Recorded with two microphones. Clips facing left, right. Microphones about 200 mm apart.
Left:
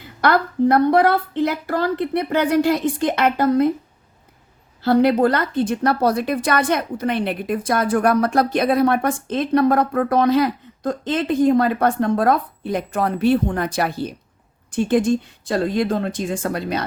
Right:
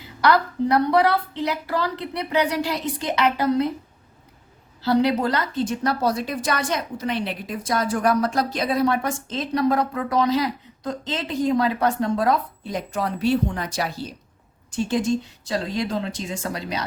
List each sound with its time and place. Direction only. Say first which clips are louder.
0.0 s a woman's voice: left 1 dB; 55° left (ahead or behind)
4.8 s a woman's voice: left 5 dB; 50° left (ahead or behind)